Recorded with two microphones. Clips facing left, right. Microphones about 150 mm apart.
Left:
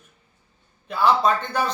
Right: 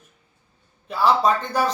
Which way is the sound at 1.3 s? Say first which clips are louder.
Right 1 dB; 35° right (ahead or behind).